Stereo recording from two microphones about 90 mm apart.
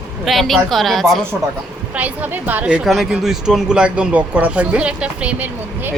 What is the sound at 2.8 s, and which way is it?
Speech, 5° right (ahead or behind).